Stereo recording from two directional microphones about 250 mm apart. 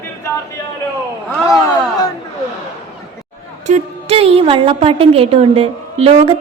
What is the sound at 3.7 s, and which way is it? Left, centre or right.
A woman's voice, right.